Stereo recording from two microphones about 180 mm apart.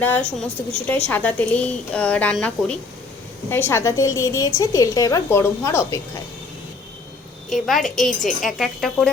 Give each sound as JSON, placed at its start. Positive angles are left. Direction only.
{"t": 0.0, "sound": "a woman's voice", "side_deg": 10}
{"t": 7.5, "sound": "a woman's voice", "side_deg": 0}